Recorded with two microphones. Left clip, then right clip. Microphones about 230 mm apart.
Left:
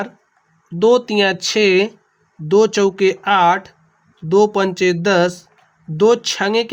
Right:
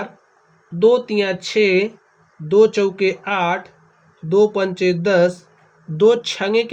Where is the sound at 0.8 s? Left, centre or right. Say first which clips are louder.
Left 2 dB; left.